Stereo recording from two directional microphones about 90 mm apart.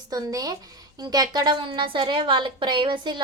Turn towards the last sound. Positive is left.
turn(degrees=-60)  # may be behind; listen again after turning